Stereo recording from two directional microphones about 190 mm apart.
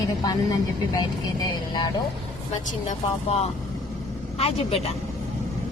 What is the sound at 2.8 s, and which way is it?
Speech, 35° left (ahead or behind).